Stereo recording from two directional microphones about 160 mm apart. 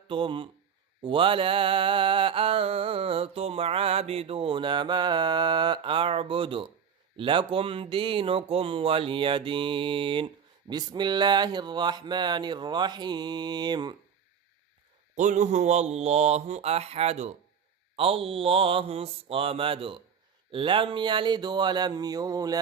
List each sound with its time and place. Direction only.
0.1 s mantra: 30° right (ahead or behind)
7.2 s speech: 30° right (ahead or behind)
15.1 s speech: 50° right (ahead or behind)
17.9 s mantra: 35° right (ahead or behind)
20.5 s speech: 35° right (ahead or behind)